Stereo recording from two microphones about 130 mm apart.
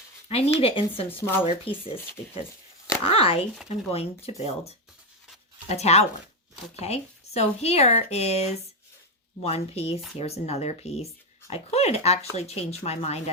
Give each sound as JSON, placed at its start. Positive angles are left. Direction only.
{"t": 0.3, "sound": "speech", "side_deg": 50}